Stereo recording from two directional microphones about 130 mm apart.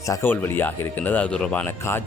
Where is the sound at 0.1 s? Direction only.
20° left (ahead or behind).